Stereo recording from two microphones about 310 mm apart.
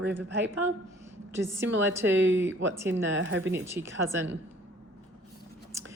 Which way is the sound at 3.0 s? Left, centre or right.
Right.